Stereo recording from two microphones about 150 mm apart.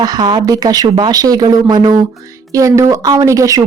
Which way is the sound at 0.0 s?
25° right (ahead or behind).